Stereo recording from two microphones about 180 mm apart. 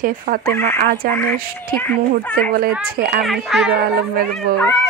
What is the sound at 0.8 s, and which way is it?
Speech, 60° right (ahead or behind).